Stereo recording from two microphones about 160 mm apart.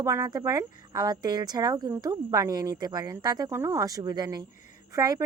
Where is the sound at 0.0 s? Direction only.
20° right (ahead or behind).